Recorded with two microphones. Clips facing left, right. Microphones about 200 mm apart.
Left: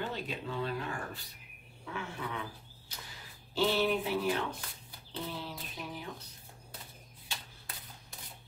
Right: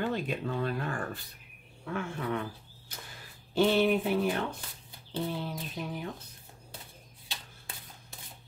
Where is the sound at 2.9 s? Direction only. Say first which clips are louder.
Right 2 dB; 50° right (ahead or behind).